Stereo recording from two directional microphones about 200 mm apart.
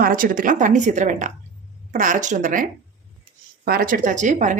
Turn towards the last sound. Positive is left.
turn(degrees=-40)  # may be behind; listen again after turning